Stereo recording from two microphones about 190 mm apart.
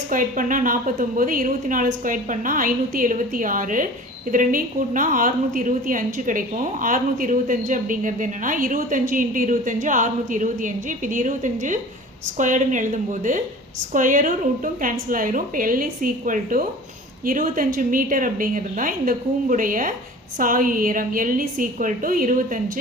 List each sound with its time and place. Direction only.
0.1 s a woman's voice: 45° right (ahead or behind)